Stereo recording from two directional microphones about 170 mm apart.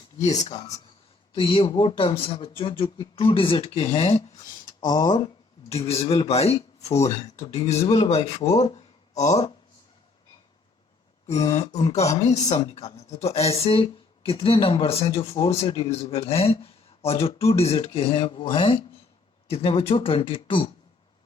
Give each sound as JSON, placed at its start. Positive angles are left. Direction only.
{"t": 0.3, "sound": "speech", "side_deg": 40}
{"t": 1.3, "sound": "speech", "side_deg": 30}
{"t": 4.8, "sound": "speech", "side_deg": 25}
{"t": 5.7, "sound": "speech", "side_deg": 35}
{"t": 11.5, "sound": "speech", "side_deg": 40}